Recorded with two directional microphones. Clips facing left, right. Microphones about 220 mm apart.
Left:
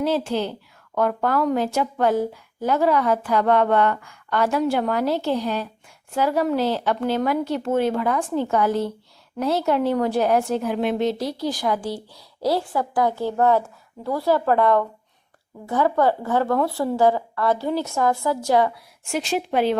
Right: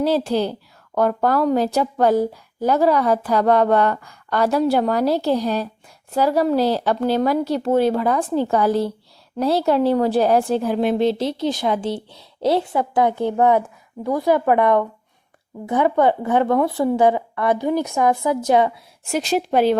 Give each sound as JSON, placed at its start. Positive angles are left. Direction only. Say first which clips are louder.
{"t": 0.0, "sound": "a woman's voice", "louder": "right 3 dB", "side_deg": -35}
{"t": 19.0, "sound": "a woman's voice", "louder": "right 3 dB", "side_deg": -40}